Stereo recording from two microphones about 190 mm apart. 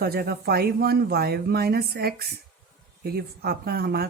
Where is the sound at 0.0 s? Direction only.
55° right (ahead or behind).